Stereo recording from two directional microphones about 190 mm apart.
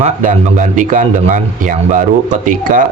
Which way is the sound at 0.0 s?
40° right (ahead or behind).